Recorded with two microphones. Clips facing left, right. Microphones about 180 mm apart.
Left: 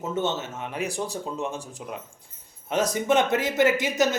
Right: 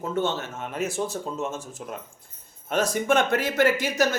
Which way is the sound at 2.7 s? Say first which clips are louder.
Even; 15° left (ahead or behind).